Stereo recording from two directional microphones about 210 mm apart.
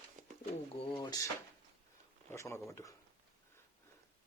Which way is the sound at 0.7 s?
25° left (ahead or behind).